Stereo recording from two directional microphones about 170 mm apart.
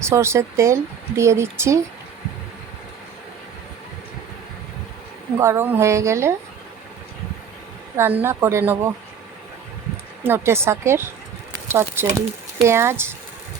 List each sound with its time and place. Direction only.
0.1 s speech: 15° right (ahead or behind)
5.4 s speech: 15° right (ahead or behind)
7.9 s speech: 10° right (ahead or behind)
10.2 s speech: 15° right (ahead or behind)